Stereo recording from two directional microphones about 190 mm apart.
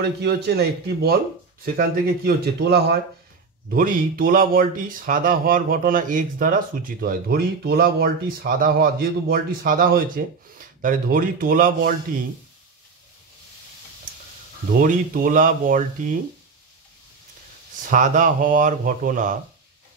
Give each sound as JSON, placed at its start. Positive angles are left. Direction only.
{"t": 0.0, "sound": "speech", "side_deg": -60}
{"t": 3.7, "sound": "speech", "side_deg": -45}
{"t": 14.7, "sound": "speech", "side_deg": -45}
{"t": 17.8, "sound": "speech", "side_deg": -40}